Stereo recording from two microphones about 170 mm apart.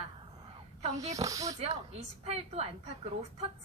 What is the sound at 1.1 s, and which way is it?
Speech, 20° right (ahead or behind).